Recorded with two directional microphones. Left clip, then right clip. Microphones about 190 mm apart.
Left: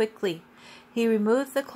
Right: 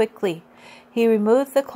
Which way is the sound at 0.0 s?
30° right (ahead or behind).